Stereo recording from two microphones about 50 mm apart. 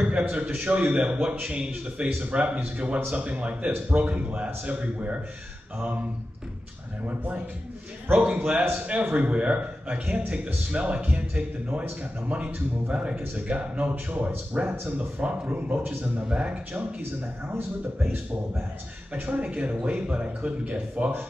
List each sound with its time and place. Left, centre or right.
0.0 s a man's voice: right
8.1 s a man's voice: right
16.3 s a man's voice: right
17.6 s speech: right
19.4 s a man's voice: right